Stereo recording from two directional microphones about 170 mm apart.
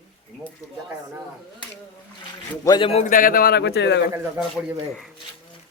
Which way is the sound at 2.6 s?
20° left (ahead or behind).